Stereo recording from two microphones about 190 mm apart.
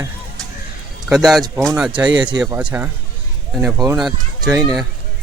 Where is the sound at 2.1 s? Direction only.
25° right (ahead or behind).